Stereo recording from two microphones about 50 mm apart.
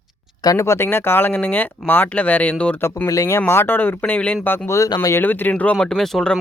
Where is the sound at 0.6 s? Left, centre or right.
Left.